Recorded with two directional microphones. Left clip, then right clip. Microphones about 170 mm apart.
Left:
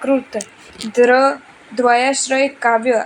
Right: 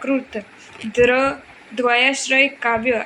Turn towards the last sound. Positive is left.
turn(degrees=25)  # may be behind; listen again after turning